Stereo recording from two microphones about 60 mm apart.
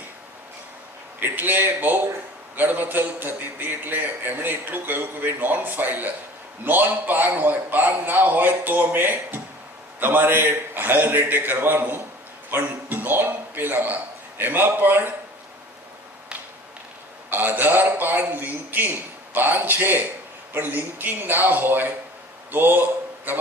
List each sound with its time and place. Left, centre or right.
1.2 s a man's voice: right
17.2 s a man's voice: right